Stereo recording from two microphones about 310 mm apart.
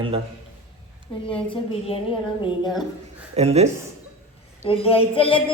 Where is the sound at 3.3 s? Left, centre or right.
Centre.